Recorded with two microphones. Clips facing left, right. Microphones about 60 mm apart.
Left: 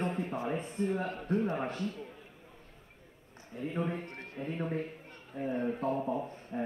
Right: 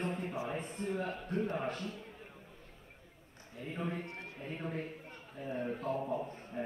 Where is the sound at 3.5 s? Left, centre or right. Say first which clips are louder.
Left 5 dB; left.